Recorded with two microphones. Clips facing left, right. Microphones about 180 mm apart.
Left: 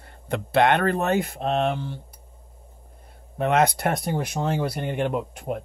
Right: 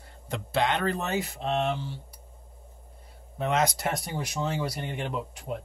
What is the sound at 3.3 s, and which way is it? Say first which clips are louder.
Speech: left 6 dB; 60° left (ahead or behind).